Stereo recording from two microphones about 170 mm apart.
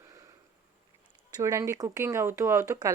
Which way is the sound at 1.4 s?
15° right (ahead or behind).